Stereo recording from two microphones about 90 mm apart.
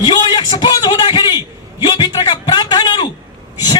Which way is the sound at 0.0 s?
55° left (ahead or behind).